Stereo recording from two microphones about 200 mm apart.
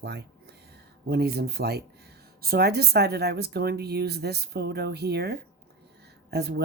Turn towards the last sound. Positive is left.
turn(degrees=-55)  # may be behind; listen again after turning